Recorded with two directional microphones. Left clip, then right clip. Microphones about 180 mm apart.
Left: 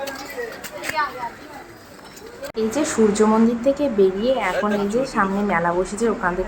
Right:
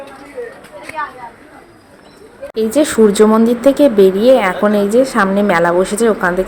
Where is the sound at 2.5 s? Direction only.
35° right (ahead or behind).